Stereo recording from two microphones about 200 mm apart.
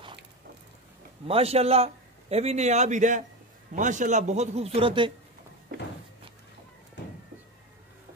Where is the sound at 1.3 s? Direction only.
30° right (ahead or behind).